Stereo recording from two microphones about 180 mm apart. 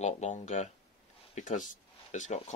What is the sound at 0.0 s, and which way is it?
Speech, 40° left (ahead or behind).